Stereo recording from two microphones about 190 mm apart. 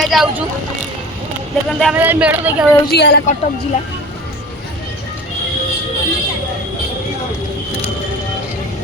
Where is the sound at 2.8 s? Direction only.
60° left (ahead or behind).